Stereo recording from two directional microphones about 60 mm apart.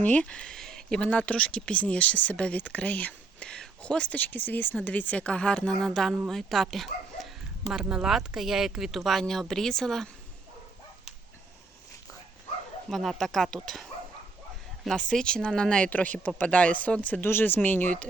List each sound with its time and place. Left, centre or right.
0.0 s speech: left
5.9 s speech: centre
12.9 s speech: centre
14.9 s speech: centre
15.9 s speech: left